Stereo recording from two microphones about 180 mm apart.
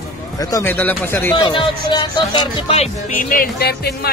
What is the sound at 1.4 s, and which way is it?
Speech, 25° left (ahead or behind).